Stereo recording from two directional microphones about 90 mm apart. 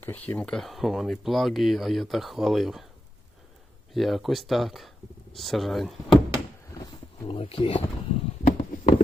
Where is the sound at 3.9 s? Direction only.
Centre (ahead or behind).